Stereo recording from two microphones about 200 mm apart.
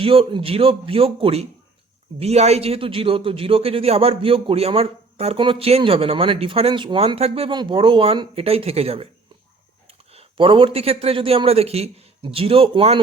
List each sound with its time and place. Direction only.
0.0 s a man's voice: 25° right (ahead or behind)